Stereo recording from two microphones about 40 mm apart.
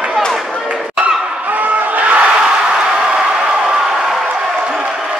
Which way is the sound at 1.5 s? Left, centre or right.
Right.